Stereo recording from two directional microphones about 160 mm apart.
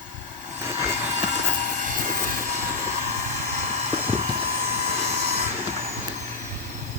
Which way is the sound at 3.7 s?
45° right (ahead or behind).